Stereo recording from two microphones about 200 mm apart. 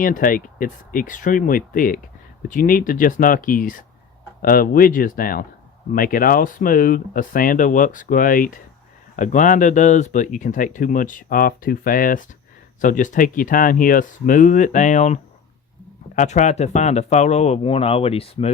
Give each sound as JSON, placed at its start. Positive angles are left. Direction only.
{"t": 0.0, "sound": "speech", "side_deg": 45}